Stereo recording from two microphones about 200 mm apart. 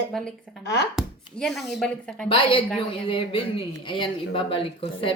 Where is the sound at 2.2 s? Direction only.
25° left (ahead or behind).